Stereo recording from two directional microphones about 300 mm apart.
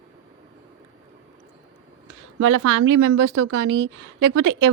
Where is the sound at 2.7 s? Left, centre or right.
Right.